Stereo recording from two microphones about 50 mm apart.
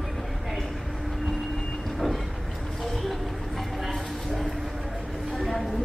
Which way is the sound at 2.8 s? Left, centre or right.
Centre.